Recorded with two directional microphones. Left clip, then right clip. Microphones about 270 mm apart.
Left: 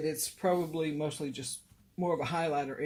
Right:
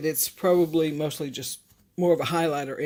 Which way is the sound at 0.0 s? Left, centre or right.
Right.